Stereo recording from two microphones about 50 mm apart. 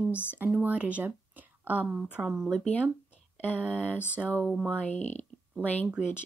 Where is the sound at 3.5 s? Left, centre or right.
Right.